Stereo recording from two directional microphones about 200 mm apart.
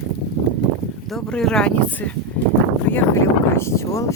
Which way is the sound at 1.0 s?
5° left (ahead or behind).